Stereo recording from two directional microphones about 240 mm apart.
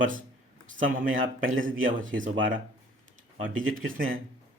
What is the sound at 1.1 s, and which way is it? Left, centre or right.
Speech, right.